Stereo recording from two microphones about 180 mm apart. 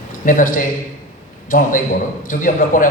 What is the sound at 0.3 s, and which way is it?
A man's voice, 50° left (ahead or behind).